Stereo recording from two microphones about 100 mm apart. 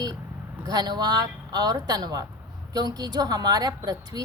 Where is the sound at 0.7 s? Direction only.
45° right (ahead or behind).